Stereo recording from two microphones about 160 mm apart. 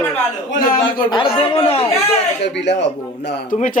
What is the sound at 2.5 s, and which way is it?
A man's voice, 90° left.